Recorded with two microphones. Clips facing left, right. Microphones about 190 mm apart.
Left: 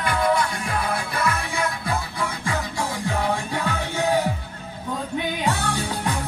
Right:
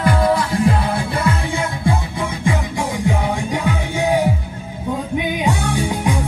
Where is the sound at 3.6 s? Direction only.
15° right (ahead or behind).